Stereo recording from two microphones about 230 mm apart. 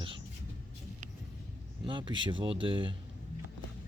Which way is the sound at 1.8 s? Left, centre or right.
Right.